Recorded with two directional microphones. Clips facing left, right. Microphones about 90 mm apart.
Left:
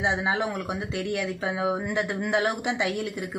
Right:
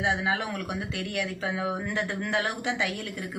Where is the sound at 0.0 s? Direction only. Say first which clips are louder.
Left 2 dB; 20° left (ahead or behind).